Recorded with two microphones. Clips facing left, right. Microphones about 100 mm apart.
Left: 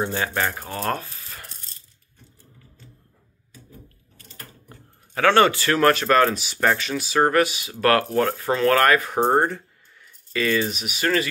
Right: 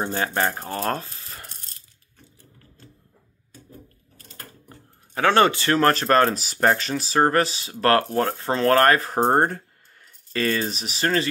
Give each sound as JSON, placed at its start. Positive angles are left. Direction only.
{"t": 0.0, "sound": "speech", "side_deg": -40}
{"t": 5.1, "sound": "speech", "side_deg": -25}
{"t": 9.3, "sound": "speech", "side_deg": -50}